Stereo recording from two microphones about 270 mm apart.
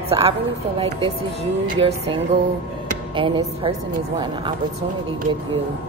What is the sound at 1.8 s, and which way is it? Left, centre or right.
Speech, centre.